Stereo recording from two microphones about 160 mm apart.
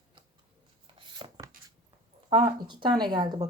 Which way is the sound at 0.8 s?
30° right (ahead or behind).